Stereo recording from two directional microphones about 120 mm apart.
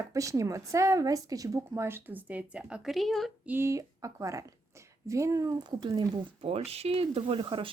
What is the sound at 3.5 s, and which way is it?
Speech, 20° right (ahead or behind).